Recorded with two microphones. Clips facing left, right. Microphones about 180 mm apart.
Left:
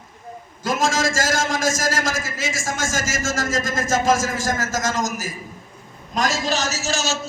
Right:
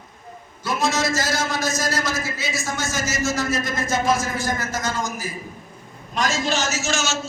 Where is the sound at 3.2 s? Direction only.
90° left.